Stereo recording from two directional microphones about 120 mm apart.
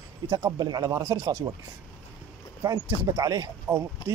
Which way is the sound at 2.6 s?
30° right (ahead or behind).